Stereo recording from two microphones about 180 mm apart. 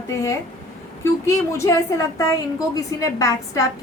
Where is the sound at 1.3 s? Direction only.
15° left (ahead or behind).